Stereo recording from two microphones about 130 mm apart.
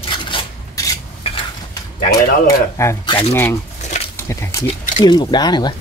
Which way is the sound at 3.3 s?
20° left (ahead or behind).